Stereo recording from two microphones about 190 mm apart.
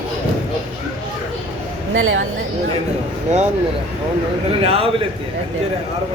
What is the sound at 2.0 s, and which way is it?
Speech, 90° right.